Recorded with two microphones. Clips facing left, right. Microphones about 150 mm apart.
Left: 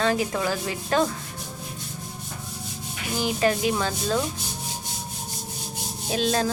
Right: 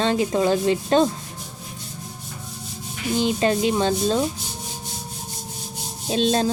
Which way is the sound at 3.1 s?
25° right (ahead or behind).